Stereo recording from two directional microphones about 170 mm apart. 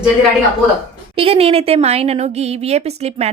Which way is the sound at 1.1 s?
35° right (ahead or behind).